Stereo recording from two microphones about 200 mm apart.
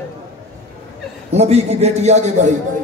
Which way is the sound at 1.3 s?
30° right (ahead or behind).